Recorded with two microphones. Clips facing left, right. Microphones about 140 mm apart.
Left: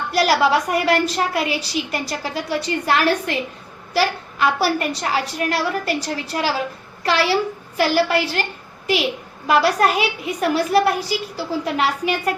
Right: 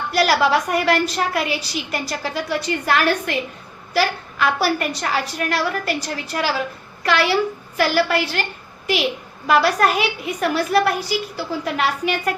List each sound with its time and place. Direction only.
0.1 s a woman's voice: 30° left (ahead or behind)
9.5 s a woman's voice: 30° left (ahead or behind)